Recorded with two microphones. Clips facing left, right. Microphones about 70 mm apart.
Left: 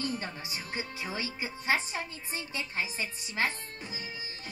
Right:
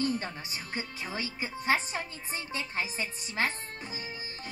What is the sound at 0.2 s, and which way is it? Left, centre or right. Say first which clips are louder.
A woman's voice: even; right.